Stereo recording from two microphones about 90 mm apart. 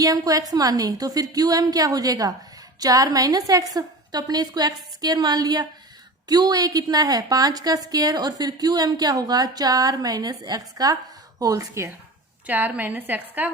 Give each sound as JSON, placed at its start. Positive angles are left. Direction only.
{"t": 0.0, "sound": "a woman's voice", "side_deg": -40}
{"t": 12.5, "sound": "a woman's voice", "side_deg": -20}